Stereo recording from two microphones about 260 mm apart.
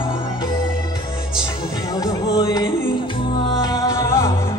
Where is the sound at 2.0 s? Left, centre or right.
Centre.